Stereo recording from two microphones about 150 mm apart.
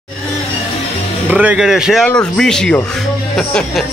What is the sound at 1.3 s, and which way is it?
A man's voice, 10° right (ahead or behind).